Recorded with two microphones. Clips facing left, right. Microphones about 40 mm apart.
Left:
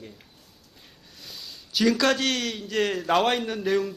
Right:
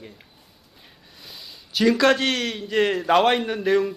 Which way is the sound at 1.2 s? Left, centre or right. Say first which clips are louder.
Even; centre.